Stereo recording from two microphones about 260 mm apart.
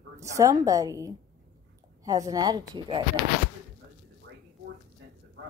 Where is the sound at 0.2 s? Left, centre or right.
Centre.